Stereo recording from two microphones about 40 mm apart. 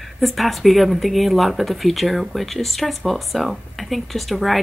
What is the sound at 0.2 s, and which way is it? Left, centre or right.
Speech, centre.